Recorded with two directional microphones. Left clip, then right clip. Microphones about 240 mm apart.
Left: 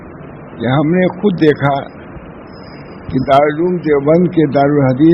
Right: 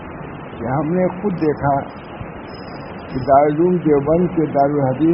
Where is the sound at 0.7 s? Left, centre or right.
Left.